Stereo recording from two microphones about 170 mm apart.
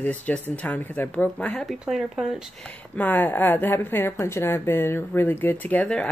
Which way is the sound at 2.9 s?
10° left (ahead or behind).